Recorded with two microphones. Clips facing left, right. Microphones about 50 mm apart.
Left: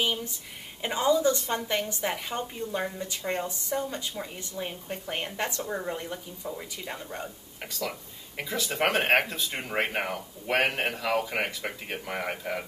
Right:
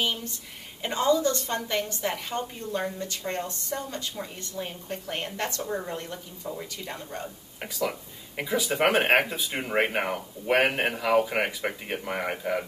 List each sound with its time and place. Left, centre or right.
0.0 s a woman's voice: centre
8.4 s speech: centre